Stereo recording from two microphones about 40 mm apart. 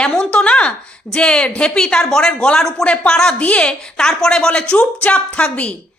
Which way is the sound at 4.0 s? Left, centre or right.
Centre.